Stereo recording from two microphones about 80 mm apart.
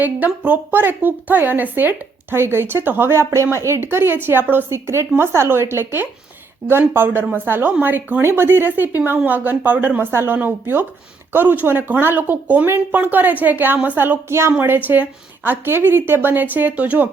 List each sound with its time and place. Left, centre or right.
0.0 s a woman's voice: right